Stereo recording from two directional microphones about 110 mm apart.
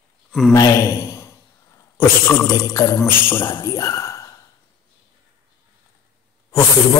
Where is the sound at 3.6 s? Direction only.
30° left (ahead or behind).